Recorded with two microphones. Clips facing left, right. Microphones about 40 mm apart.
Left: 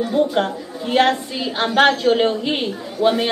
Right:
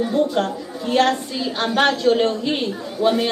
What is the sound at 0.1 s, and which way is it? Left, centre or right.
A woman's voice, centre.